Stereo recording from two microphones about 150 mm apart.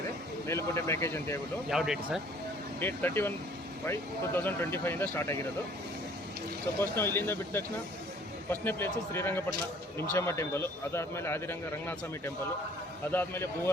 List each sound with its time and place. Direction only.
0.4 s a man's voice: 20° left (ahead or behind)
1.7 s speech: 5° right (ahead or behind)
2.8 s a man's voice: 15° left (ahead or behind)
6.7 s a man's voice: 15° left (ahead or behind)